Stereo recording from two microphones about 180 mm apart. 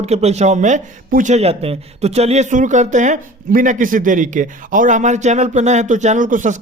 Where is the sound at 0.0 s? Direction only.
35° right (ahead or behind).